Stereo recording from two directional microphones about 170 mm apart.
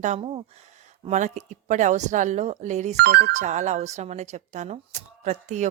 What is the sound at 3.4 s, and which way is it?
Speech, 45° right (ahead or behind).